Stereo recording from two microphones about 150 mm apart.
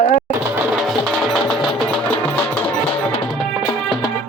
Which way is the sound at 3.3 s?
5° right (ahead or behind).